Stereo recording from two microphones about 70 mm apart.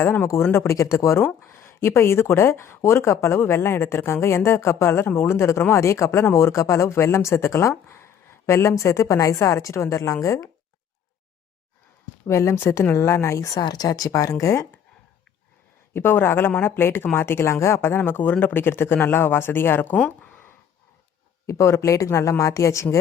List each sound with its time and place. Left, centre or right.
0.0 s a woman's voice: left
12.3 s speech: left
13.6 s speech: left
15.9 s speech: left
21.4 s speech: left